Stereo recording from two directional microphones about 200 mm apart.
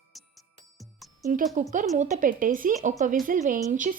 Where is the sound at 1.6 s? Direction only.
35° right (ahead or behind).